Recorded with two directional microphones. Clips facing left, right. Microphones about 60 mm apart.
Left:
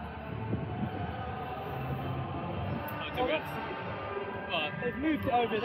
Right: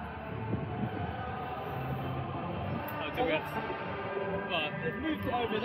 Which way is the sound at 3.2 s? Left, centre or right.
Right.